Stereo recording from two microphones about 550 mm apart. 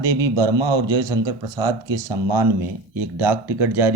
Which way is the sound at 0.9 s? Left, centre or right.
Centre.